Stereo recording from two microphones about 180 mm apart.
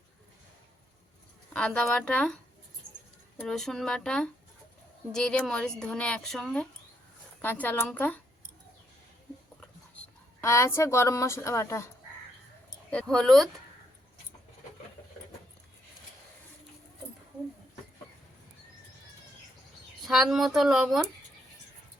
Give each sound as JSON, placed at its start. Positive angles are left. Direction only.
{"t": 1.5, "sound": "a woman's voice", "side_deg": 5}
{"t": 10.4, "sound": "a woman's voice", "side_deg": 15}
{"t": 12.9, "sound": "speech", "side_deg": 5}
{"t": 20.3, "sound": "speech", "side_deg": 0}